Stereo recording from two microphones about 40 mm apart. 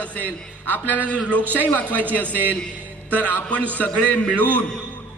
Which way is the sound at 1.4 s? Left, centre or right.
Right.